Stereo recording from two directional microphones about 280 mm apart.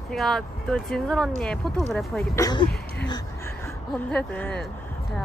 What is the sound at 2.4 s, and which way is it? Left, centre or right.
Speech, centre.